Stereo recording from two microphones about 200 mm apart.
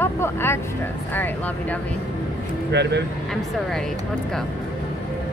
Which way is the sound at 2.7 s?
60° right (ahead or behind).